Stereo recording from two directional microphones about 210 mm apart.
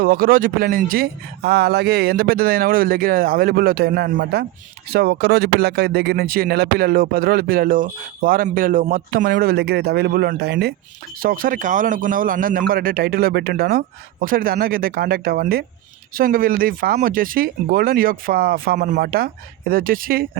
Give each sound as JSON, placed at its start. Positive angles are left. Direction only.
{"t": 0.0, "sound": "speech", "side_deg": -45}